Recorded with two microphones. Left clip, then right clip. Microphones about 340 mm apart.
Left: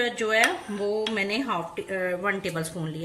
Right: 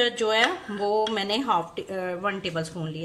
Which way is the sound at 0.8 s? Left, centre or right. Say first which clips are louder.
Right 3 dB; right.